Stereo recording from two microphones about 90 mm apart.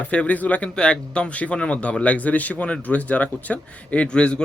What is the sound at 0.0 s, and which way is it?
A man's voice, 15° left (ahead or behind).